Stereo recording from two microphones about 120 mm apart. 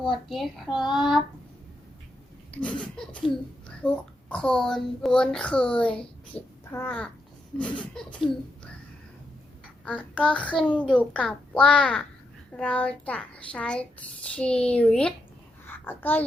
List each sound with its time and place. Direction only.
0.0 s a child's voice: centre (ahead or behind)
2.6 s a child's voice: 10° left (ahead or behind)
6.7 s speech: 20° left (ahead or behind)
7.6 s a child's voice: 10° left (ahead or behind)
9.8 s a child's voice: 10° left (ahead or behind)
15.6 s a sound: 15° left (ahead or behind)